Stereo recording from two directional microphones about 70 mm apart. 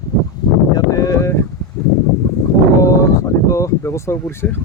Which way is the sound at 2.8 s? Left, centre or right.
Left.